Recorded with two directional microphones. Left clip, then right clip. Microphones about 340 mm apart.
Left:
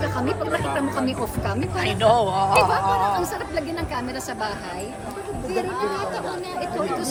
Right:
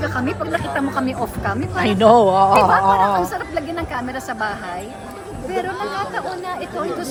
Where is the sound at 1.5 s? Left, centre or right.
Centre.